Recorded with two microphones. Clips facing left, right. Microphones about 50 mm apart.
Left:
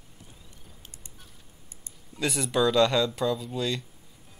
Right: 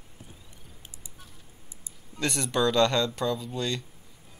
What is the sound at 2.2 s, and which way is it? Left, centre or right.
Speech, centre.